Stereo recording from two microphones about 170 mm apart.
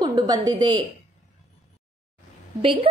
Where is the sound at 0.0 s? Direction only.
25° right (ahead or behind).